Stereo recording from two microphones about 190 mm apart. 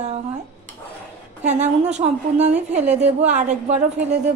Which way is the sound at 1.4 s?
35° right (ahead or behind).